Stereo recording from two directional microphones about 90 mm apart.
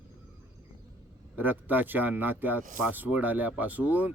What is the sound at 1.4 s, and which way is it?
Speech, 20° right (ahead or behind).